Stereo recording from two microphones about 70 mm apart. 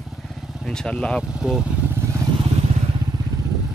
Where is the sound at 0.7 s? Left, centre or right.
Centre.